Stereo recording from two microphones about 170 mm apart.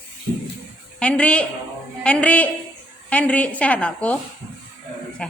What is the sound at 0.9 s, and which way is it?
A woman's voice, 5° left (ahead or behind).